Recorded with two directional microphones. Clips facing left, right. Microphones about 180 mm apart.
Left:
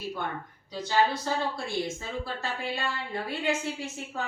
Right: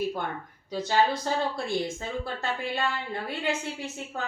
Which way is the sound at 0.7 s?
45° right (ahead or behind).